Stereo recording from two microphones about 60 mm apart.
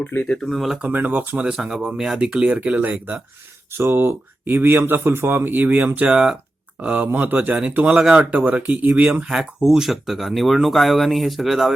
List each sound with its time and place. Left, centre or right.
0.0 s speech: left
0.4 s speech: centre
0.8 s speech: right
1.5 s speech: centre
2.6 s speech: right
3.8 s speech: right
6.1 s speech: centre
7.9 s speech: centre
9.2 s speech: centre